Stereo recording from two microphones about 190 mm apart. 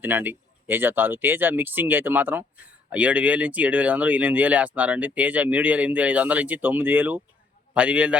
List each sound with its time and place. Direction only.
0.0 s speech: 10° right (ahead or behind)